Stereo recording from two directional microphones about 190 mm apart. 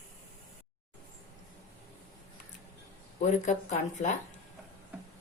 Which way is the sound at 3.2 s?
40° left (ahead or behind).